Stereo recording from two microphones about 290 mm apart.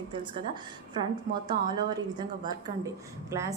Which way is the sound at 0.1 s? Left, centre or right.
Centre.